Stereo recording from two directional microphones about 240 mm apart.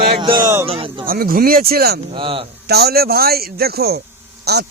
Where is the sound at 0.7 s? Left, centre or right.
Right.